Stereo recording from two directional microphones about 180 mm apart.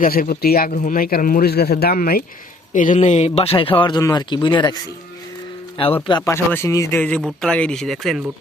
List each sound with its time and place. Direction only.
0.0 s speech: 55° left (ahead or behind); by 4.8 s 25° left (ahead or behind)
6.1 s speech: 25° left (ahead or behind)
6.3 s speech: 15° left (ahead or behind)